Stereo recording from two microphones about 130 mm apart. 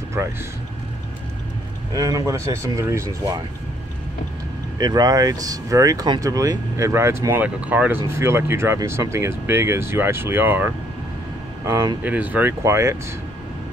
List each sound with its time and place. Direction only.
0.2 s speech: 20° right (ahead or behind)
2.0 s speech: 25° right (ahead or behind)
4.7 s speech: 30° right (ahead or behind); by 10.7 s 15° right (ahead or behind)
12.0 s speech: 10° right (ahead or behind)